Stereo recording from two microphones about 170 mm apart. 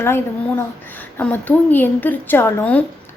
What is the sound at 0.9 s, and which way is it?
A woman's voice, 10° left (ahead or behind).